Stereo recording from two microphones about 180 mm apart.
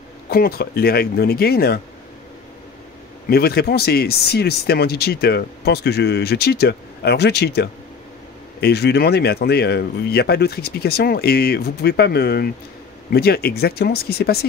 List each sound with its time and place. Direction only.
0.3 s speech: 55° left (ahead or behind)
3.3 s speech: 60° left (ahead or behind)